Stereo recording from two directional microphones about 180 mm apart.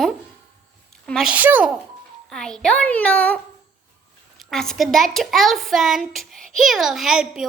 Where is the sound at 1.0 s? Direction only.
Centre (ahead or behind).